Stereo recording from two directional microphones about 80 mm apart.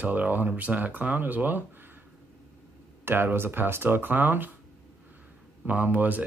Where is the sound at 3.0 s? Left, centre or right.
Right.